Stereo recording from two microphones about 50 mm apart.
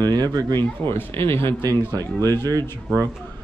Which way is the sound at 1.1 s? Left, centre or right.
Left.